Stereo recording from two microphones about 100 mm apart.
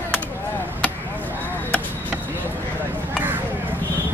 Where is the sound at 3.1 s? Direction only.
20° right (ahead or behind).